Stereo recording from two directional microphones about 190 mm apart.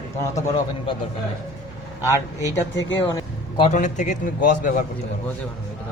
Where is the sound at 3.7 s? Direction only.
40° left (ahead or behind).